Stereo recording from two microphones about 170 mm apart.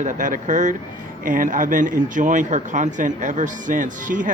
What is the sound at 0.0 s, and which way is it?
Speech, 50° right (ahead or behind).